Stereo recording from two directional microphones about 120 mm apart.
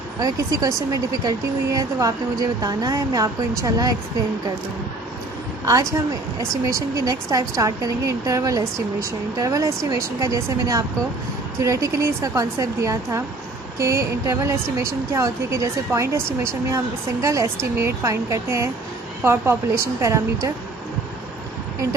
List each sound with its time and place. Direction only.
0.2 s speech: 30° right (ahead or behind)
5.6 s a woman's voice: 30° right (ahead or behind)